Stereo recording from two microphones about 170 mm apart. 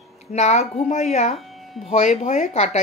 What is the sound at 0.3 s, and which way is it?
Speech, 40° left (ahead or behind).